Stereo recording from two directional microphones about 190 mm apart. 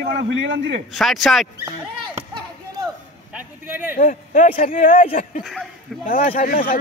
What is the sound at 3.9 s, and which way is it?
A man's voice, 45° left (ahead or behind).